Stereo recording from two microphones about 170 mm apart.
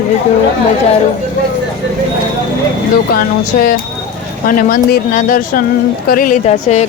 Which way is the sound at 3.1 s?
60° left (ahead or behind).